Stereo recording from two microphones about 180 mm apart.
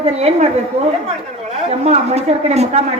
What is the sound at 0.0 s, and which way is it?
Speech, 35° right (ahead or behind).